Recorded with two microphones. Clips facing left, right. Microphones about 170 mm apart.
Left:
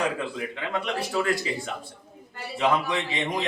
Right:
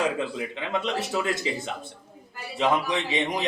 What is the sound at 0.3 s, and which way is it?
Speech, 20° right (ahead or behind).